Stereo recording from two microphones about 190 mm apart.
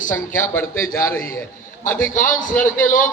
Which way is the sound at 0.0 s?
45° left (ahead or behind).